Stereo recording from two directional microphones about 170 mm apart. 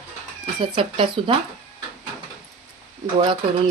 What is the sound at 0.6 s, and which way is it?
Speech, 30° right (ahead or behind).